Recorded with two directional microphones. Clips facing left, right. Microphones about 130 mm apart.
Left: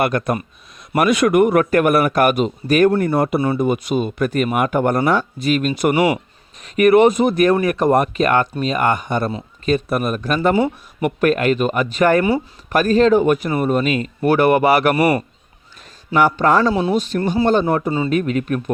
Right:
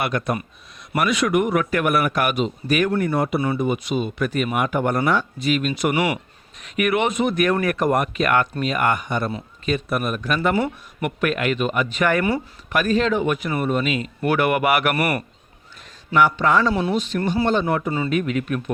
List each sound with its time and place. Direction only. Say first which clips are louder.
0.0 s a man's voice: left 5 dB; 45° left (ahead or behind)
7.5 s a man's voice: left 5 dB; 20° left (ahead or behind)
14.9 s speech: left 6 dB; 25° left (ahead or behind)
16.1 s a man's voice: left 3 dB; 40° left (ahead or behind)
18.1 s a man's voice: left 3 dB; 40° left (ahead or behind)